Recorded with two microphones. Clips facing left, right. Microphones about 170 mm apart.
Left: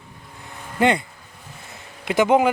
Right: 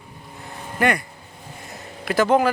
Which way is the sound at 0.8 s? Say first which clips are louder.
Left 2 dB; 25° left (ahead or behind).